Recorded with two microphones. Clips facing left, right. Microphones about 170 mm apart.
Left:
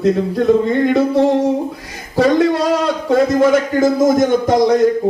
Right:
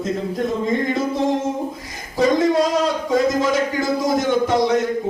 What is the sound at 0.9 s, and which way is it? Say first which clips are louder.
Music: left 7 dB; 65° left (ahead or behind).